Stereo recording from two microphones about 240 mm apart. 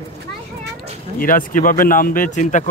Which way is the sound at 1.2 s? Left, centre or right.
Left.